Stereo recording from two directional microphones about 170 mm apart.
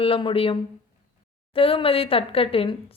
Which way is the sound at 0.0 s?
30° left (ahead or behind).